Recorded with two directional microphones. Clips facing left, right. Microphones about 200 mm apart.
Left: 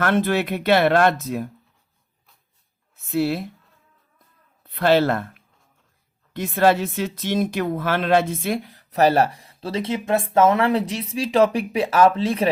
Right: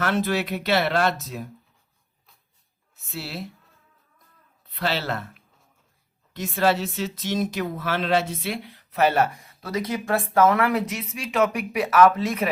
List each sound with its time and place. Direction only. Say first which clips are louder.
0.0 s speech: left 4 dB; 55° left (ahead or behind)
2.9 s a woman's voice: left 13 dB; 55° left (ahead or behind)
4.6 s speech: left 10 dB; 55° left (ahead or behind); by 12.5 s 30° left (ahead or behind)